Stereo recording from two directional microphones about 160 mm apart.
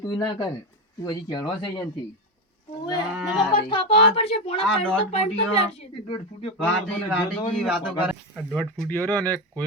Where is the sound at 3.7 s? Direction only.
35° left (ahead or behind).